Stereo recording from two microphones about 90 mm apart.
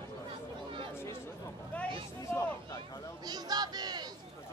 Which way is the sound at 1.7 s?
15° left (ahead or behind).